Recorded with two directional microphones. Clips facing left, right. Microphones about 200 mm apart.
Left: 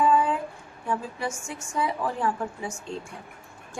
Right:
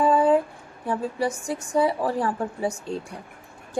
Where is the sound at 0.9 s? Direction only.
35° right (ahead or behind).